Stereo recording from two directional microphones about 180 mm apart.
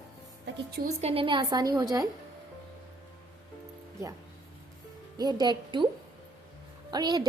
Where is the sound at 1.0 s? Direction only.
35° right (ahead or behind).